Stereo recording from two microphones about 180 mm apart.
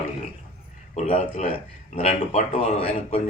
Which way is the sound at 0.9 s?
35° left (ahead or behind).